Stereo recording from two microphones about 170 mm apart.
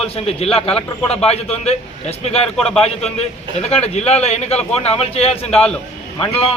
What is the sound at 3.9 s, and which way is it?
A man's voice, 40° left (ahead or behind).